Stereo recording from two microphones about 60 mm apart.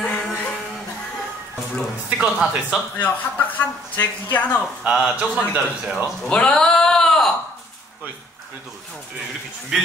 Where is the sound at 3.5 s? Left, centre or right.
Left.